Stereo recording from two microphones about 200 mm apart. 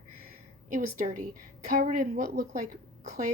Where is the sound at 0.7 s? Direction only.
40° right (ahead or behind).